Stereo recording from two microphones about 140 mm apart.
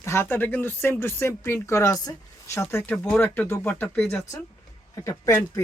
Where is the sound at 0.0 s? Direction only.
20° left (ahead or behind).